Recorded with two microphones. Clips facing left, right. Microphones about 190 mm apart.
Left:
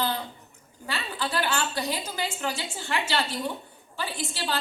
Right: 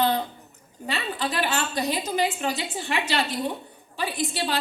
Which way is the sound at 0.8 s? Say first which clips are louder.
Right 4 dB; 20° right (ahead or behind).